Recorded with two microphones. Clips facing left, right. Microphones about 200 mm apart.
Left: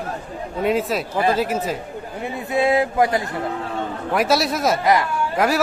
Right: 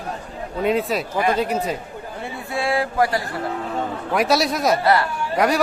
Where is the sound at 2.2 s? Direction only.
20° left (ahead or behind).